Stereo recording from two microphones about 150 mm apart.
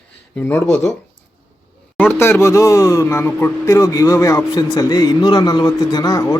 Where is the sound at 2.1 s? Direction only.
15° left (ahead or behind).